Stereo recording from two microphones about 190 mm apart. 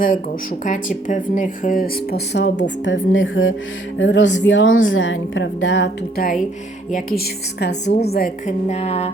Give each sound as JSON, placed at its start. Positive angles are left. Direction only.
{"t": 0.6, "sound": "speech", "side_deg": 45}
{"t": 3.9, "sound": "a woman's voice", "side_deg": 70}
{"t": 6.9, "sound": "speech", "side_deg": 55}
{"t": 8.4, "sound": "a sound", "side_deg": 35}